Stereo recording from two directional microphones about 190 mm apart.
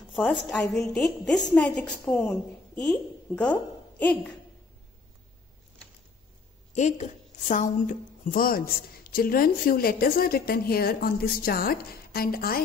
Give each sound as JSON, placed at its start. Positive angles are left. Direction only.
{"t": 0.1, "sound": "a woman's voice", "side_deg": 0}
{"t": 6.7, "sound": "a woman's voice", "side_deg": 40}